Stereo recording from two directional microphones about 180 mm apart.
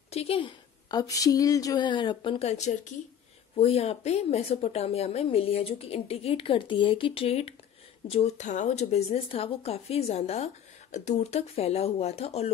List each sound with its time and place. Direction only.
0.1 s a woman's voice: 35° left (ahead or behind)